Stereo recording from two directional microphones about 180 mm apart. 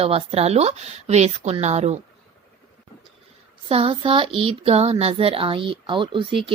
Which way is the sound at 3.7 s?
30° right (ahead or behind).